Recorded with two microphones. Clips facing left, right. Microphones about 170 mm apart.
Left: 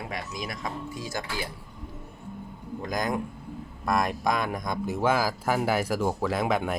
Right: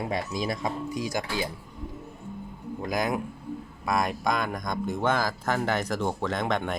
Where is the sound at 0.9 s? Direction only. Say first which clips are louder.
Right 4 dB; 15° right (ahead or behind).